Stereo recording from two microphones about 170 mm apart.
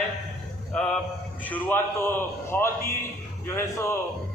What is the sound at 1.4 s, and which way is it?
A man's voice, 10° left (ahead or behind).